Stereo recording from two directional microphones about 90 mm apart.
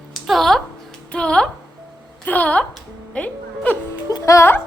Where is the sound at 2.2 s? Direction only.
15° left (ahead or behind).